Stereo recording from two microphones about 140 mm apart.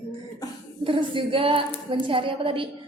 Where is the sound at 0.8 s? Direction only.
40° right (ahead or behind).